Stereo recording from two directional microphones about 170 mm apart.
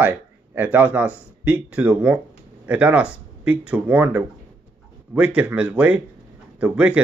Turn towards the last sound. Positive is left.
turn(degrees=-5)  # may be behind; listen again after turning